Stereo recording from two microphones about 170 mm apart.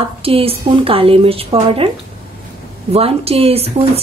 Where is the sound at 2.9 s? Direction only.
35° right (ahead or behind).